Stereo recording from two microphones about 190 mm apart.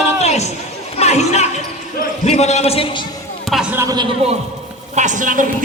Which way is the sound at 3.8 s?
20° right (ahead or behind).